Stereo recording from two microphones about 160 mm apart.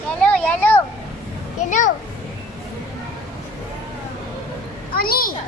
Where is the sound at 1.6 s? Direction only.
50° left (ahead or behind).